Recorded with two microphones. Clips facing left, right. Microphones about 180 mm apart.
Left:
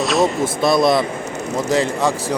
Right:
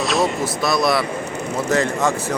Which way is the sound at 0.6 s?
25° left (ahead or behind).